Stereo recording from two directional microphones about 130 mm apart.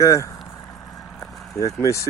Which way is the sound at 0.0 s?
25° left (ahead or behind).